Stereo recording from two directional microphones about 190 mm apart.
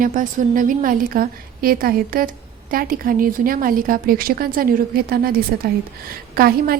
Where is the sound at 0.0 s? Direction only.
45° right (ahead or behind).